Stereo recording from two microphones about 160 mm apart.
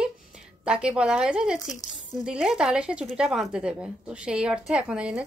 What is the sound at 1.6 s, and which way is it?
Speech, 20° left (ahead or behind).